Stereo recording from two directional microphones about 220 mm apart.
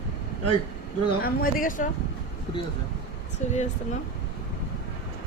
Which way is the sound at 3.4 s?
35° left (ahead or behind).